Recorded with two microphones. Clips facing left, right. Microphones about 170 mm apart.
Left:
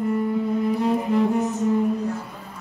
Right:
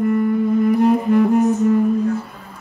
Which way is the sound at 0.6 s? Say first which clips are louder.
Right 6 dB; 60° right (ahead or behind).